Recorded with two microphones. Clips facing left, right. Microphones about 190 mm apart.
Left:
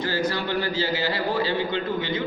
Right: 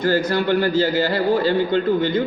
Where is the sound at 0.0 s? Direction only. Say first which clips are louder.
Right 7 dB; 50° right (ahead or behind).